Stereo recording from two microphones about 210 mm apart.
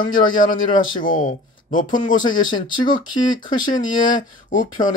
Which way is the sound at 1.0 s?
40° left (ahead or behind).